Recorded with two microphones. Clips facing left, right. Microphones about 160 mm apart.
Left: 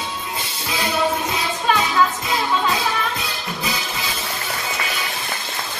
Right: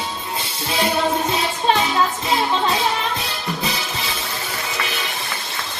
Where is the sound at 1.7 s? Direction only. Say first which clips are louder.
Even; 30° right (ahead or behind).